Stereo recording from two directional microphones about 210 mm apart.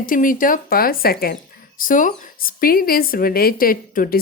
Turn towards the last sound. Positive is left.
turn(degrees=45)  # may be behind; listen again after turning